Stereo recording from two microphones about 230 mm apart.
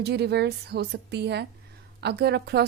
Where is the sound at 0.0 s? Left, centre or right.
Right.